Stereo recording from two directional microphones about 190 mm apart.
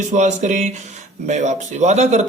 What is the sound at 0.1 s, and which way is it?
Speech, 40° right (ahead or behind).